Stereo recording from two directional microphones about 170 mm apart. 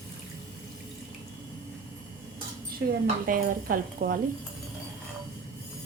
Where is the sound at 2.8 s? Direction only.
85° right.